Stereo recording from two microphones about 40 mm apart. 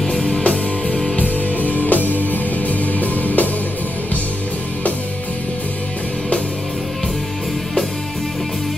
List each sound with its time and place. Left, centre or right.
0.0 s music: left
1.1 s music: left